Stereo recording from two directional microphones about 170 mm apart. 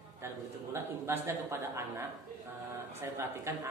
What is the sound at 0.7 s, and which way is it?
A man's voice, 15° right (ahead or behind).